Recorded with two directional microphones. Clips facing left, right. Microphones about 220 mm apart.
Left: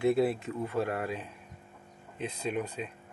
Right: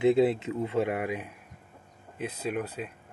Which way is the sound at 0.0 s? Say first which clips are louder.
Right 4 dB; 20° right (ahead or behind).